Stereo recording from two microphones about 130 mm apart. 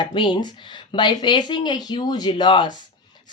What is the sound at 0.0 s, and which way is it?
Speech, 40° left (ahead or behind).